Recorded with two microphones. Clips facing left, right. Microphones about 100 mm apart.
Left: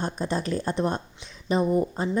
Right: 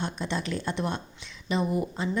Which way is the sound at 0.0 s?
40° left (ahead or behind).